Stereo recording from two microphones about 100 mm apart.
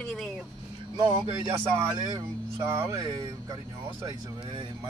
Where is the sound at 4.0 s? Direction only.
60° right (ahead or behind).